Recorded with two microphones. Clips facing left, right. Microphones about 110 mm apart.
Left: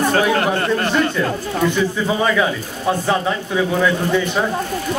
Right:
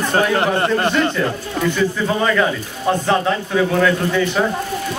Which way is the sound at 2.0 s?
5° left (ahead or behind).